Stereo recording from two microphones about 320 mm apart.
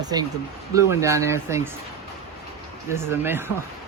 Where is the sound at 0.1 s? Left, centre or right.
Centre.